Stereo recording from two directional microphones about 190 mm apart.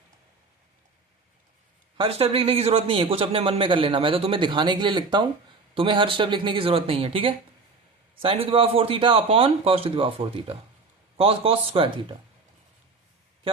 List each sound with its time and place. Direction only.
2.0 s a man's voice: 30° right (ahead or behind)